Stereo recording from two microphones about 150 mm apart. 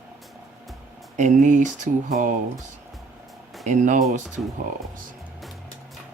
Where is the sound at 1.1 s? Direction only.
55° right (ahead or behind).